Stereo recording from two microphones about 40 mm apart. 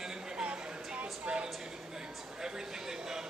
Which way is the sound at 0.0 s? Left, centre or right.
Centre.